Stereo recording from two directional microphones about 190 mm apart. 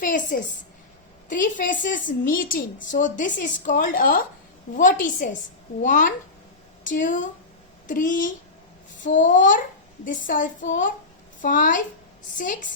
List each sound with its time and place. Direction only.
0.0 s a woman's voice: 45° left (ahead or behind)